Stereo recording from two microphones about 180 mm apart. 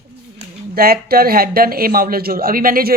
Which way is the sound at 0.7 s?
55° right (ahead or behind).